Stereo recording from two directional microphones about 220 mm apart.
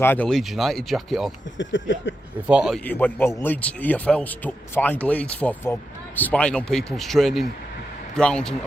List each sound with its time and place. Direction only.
0.0 s speech: 10° left (ahead or behind)
1.5 s a sound: 55° left (ahead or behind)
2.5 s a man's voice: 5° right (ahead or behind)